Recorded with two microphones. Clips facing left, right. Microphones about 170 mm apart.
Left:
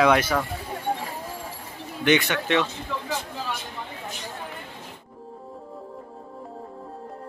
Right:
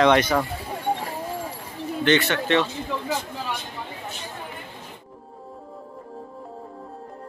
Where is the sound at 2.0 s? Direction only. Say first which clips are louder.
Right 1 dB; 15° left (ahead or behind).